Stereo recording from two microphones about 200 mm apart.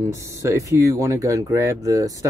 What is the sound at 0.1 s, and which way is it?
Speech, 15° right (ahead or behind).